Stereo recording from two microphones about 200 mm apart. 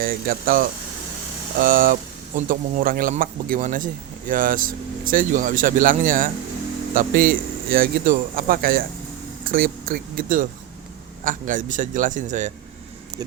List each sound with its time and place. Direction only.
0.0 s a man's voice: 45° right (ahead or behind)